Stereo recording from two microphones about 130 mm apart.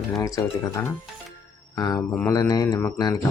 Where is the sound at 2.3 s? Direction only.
30° left (ahead or behind).